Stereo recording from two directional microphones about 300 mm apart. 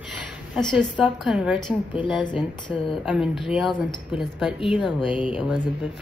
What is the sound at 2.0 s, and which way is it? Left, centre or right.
Speech, centre.